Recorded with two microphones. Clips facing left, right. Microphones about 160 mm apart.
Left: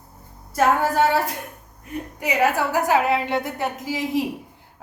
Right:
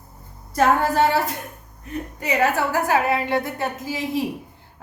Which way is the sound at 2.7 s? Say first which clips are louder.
Left 1 dB; 15° left (ahead or behind).